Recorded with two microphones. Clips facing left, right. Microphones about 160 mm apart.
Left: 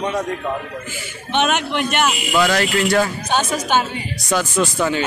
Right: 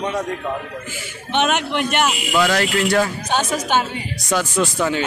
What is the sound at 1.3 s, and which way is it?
Speech, 10° right (ahead or behind).